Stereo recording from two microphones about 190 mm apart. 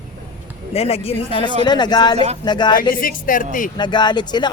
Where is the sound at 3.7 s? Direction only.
25° left (ahead or behind).